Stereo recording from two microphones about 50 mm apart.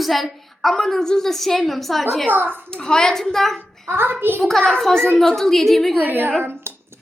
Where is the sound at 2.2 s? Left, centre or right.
Right.